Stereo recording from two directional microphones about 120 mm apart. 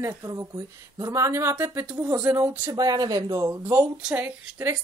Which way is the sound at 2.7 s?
30° right (ahead or behind).